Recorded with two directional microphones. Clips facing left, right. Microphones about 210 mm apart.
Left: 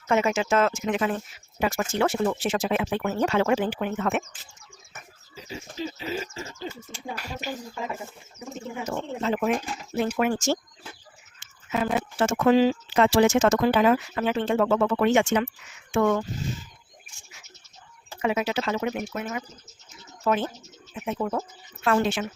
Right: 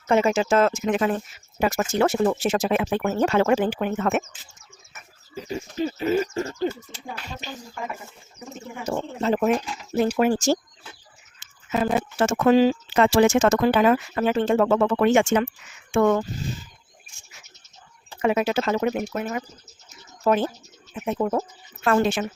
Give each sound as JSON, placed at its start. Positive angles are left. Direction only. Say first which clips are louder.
{"t": 0.1, "sound": "speech", "louder": "right 3 dB", "side_deg": -35}
{"t": 5.3, "sound": "speech", "louder": "right 8 dB", "side_deg": -55}
{"t": 6.3, "sound": "bird", "louder": "right 10 dB", "side_deg": -55}
{"t": 8.8, "sound": "speech", "louder": "right 3 dB", "side_deg": -35}
{"t": 18.2, "sound": "speech", "louder": "right 4 dB", "side_deg": -50}